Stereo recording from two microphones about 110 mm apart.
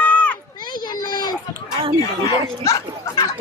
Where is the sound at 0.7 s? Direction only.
40° left (ahead or behind).